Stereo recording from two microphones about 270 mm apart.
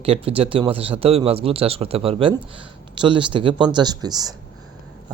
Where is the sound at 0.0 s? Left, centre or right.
Right.